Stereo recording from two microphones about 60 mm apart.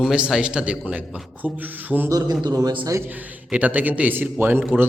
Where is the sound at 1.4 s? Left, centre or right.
Right.